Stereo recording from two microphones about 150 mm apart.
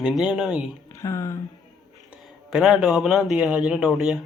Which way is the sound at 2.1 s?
Centre (ahead or behind).